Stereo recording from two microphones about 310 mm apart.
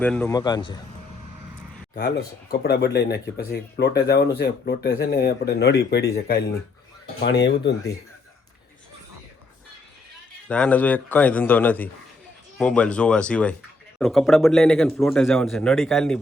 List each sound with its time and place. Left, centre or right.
0.0 s a man's voice: centre
2.0 s speech: left
10.5 s speech: centre